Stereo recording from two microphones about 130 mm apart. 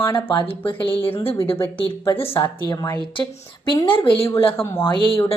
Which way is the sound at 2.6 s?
35° left (ahead or behind).